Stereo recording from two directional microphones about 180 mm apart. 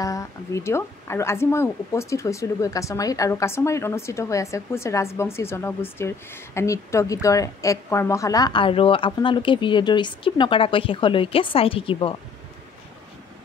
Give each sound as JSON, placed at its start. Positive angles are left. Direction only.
{"t": 0.0, "sound": "speech", "side_deg": 20}